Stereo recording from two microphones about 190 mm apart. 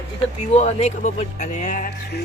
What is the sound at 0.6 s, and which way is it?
Speech, 35° left (ahead or behind).